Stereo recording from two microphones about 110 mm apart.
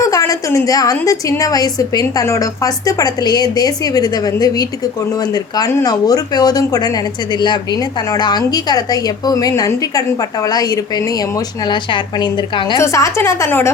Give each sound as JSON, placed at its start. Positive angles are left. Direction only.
{"t": 0.1, "sound": "a woman's voice", "side_deg": 30}
{"t": 12.7, "sound": "a woman's voice", "side_deg": 30}